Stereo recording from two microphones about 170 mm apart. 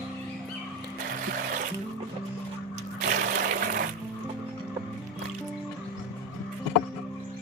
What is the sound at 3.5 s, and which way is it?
Music, 50° right (ahead or behind).